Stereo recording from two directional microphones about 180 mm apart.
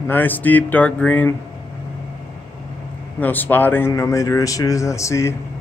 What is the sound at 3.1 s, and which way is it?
Speech, 10° left (ahead or behind).